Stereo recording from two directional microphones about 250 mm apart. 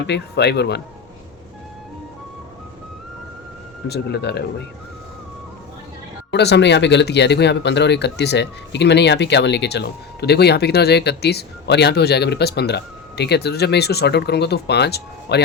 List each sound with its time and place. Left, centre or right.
0.1 s speech: left
3.8 s speech: left
6.3 s speech: left